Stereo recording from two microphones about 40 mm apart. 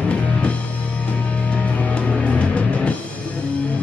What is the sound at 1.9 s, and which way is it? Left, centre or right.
Music, left.